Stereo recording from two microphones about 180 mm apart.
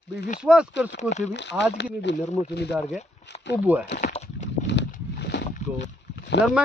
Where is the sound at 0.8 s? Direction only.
75° left (ahead or behind).